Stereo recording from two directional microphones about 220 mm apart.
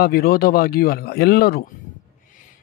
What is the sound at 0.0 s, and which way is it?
Speech, 45° left (ahead or behind).